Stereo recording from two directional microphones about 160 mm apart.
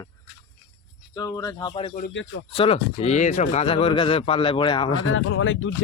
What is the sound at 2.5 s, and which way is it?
Speech, 35° left (ahead or behind).